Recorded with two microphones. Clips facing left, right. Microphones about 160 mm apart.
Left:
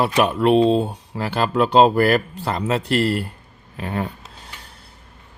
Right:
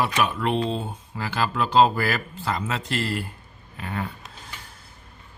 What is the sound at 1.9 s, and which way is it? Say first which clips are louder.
Speech: left 9 dB; 55° left (ahead or behind).